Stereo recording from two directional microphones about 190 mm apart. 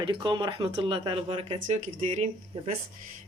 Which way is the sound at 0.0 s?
25° right (ahead or behind).